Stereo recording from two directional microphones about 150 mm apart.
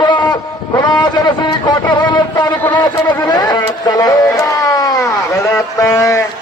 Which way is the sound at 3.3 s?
25° left (ahead or behind).